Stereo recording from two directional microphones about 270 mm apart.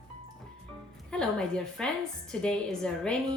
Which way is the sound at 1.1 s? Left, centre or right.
Centre.